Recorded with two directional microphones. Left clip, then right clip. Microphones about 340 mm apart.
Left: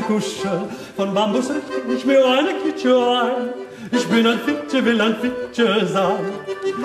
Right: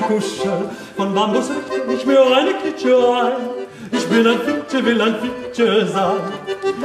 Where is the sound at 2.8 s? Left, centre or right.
Centre.